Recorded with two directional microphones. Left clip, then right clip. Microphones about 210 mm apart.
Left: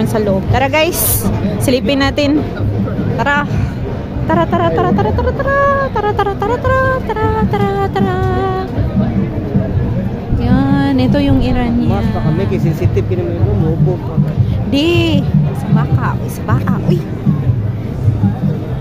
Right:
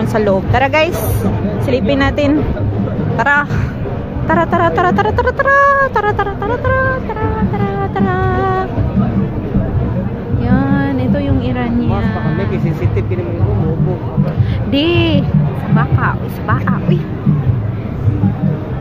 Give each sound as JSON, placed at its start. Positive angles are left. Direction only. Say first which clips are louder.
{"t": 0.0, "sound": "a sound", "louder": "right 1 dB", "side_deg": 20}
{"t": 0.3, "sound": "speech", "louder": "right 2 dB", "side_deg": 15}
{"t": 1.7, "sound": "speech", "louder": "left 1 dB", "side_deg": 35}
{"t": 3.2, "sound": "speech", "louder": "right 2 dB", "side_deg": 15}
{"t": 6.0, "sound": "speech", "louder": "left 1 dB", "side_deg": 25}
{"t": 10.4, "sound": "music", "louder": "left 1 dB", "side_deg": 25}
{"t": 11.5, "sound": "speech", "louder": "left 1 dB", "side_deg": 25}
{"t": 14.7, "sound": "speech", "louder": "even", "side_deg": 20}